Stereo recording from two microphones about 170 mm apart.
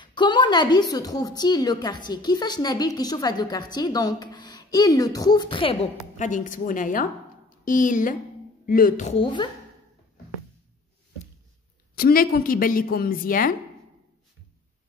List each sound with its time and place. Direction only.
0.0 s a woman's voice: 25° left (ahead or behind)
6.1 s a woman's voice: 50° left (ahead or behind)
9.2 s a woman's voice: 25° left (ahead or behind)
11.9 s a woman's voice: 60° left (ahead or behind)